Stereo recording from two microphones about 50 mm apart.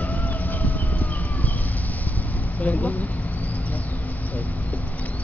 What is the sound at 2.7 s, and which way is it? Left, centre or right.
Vehicle, left.